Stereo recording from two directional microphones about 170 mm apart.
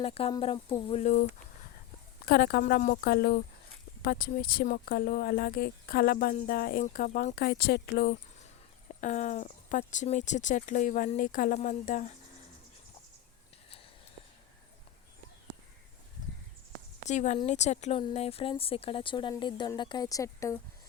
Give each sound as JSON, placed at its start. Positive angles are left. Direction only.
{"t": 0.0, "sound": "speech", "side_deg": 35}
{"t": 2.2, "sound": "speech", "side_deg": 70}
{"t": 8.9, "sound": "speech", "side_deg": 45}
{"t": 17.1, "sound": "speech", "side_deg": 45}